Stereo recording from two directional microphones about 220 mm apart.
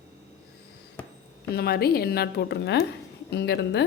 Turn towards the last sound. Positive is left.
turn(degrees=50)  # may be behind; listen again after turning